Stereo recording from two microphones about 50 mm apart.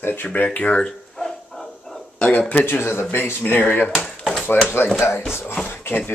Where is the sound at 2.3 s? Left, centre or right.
Left.